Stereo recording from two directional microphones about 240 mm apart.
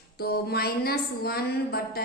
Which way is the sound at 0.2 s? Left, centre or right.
Left.